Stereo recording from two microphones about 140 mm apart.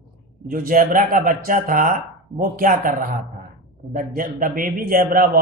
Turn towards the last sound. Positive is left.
turn(degrees=-80)